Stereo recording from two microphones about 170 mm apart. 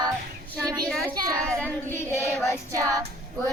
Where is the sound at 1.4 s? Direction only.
5° left (ahead or behind).